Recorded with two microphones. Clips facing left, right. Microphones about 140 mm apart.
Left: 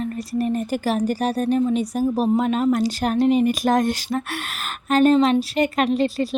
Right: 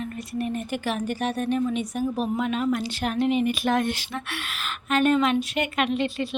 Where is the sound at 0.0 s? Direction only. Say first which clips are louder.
Left 6 dB; 35° left (ahead or behind).